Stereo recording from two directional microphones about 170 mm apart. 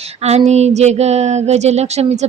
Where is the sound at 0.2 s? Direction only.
40° right (ahead or behind).